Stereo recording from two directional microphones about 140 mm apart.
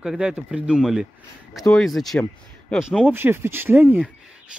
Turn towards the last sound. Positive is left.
turn(degrees=-15)  # may be behind; listen again after turning